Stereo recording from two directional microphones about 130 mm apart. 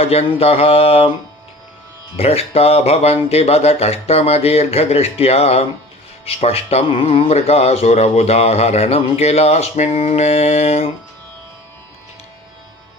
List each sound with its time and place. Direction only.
0.0 s speech: 50° left (ahead or behind)
2.1 s speech: 50° left (ahead or behind)